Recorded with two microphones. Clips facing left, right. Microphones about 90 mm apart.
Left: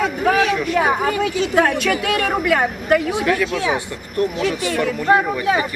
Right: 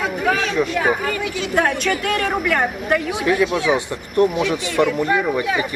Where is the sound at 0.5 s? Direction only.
20° right (ahead or behind).